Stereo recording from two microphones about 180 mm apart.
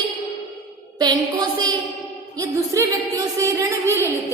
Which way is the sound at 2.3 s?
20° right (ahead or behind).